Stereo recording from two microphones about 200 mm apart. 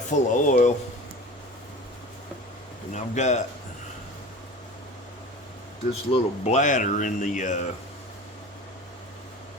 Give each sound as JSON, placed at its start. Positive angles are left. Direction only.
{"t": 0.1, "sound": "speech", "side_deg": 40}
{"t": 2.9, "sound": "speech", "side_deg": 35}
{"t": 5.9, "sound": "speech", "side_deg": 35}